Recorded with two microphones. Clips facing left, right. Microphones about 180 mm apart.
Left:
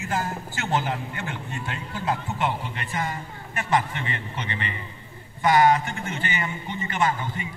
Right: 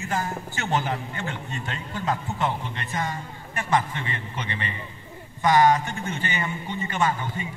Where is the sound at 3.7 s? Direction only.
15° left (ahead or behind).